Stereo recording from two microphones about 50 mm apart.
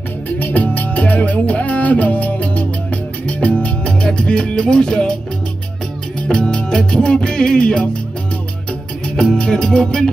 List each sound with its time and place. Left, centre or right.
0.4 s music: left; by 5.1 s centre
6.2 s music: centre
9.2 s music: centre